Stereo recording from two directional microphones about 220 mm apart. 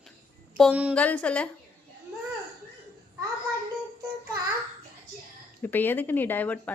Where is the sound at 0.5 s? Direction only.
Centre (ahead or behind).